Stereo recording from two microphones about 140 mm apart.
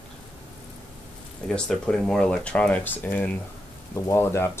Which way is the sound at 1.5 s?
5° left (ahead or behind).